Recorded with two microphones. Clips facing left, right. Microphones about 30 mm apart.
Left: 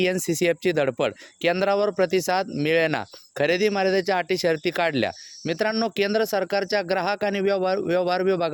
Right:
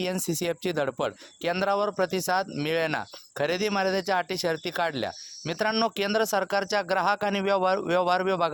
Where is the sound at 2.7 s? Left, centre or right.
Left.